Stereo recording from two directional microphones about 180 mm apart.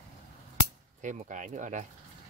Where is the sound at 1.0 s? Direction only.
45° right (ahead or behind).